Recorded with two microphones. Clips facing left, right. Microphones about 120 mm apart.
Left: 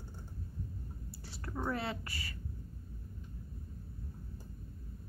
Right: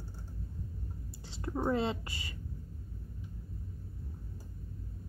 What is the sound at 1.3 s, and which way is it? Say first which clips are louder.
Speech: right 6 dB; 20° right (ahead or behind).